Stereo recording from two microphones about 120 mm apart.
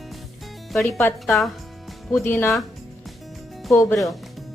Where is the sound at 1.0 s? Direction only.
15° left (ahead or behind).